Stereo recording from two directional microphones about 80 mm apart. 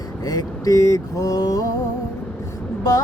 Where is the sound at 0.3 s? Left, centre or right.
Left.